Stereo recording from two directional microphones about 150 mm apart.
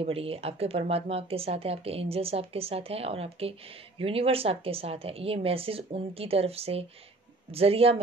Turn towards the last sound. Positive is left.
turn(degrees=-40)  # may be behind; listen again after turning